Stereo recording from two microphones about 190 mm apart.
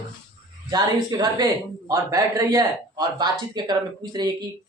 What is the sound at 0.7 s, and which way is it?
Speech, 20° right (ahead or behind).